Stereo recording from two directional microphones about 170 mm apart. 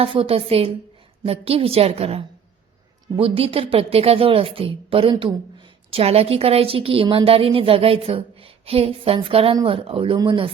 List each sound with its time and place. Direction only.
0.0 s a woman's voice: 35° right (ahead or behind)